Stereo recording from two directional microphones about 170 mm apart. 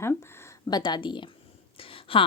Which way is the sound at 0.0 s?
15° left (ahead or behind).